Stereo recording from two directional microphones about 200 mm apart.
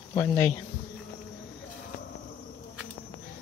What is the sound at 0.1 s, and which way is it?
Speech, 15° left (ahead or behind).